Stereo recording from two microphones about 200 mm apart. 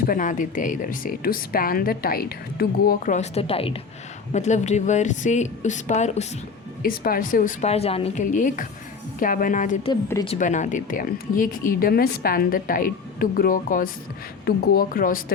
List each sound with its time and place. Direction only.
0.0 s a woman's voice: 45° left (ahead or behind)
6.8 s a woman's voice: 45° left (ahead or behind)
9.9 s a woman's voice: 15° left (ahead or behind)
10.2 s speech: 35° left (ahead or behind)